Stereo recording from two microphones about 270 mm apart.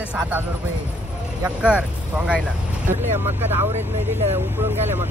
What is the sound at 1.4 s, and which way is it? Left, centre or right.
Speech, centre.